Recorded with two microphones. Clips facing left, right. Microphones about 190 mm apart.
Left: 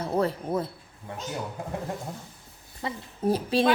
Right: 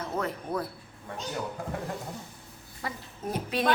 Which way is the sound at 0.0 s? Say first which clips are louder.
Left 6 dB; 30° left (ahead or behind).